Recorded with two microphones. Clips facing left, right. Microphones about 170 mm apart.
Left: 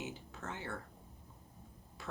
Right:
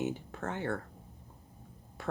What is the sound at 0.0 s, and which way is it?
Speech, 55° right (ahead or behind).